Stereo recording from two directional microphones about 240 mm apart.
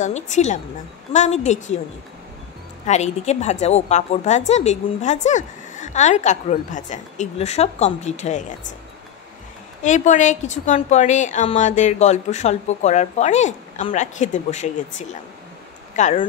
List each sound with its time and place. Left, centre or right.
0.0 s a woman's voice: left
2.9 s a woman's voice: left
9.8 s a woman's voice: left